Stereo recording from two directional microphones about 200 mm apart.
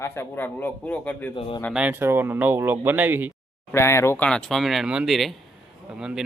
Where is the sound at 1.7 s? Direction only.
5° right (ahead or behind).